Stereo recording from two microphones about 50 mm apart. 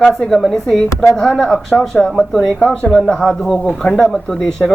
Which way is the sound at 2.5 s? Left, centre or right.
Centre.